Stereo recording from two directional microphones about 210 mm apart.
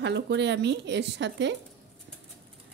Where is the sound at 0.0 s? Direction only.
55° right (ahead or behind).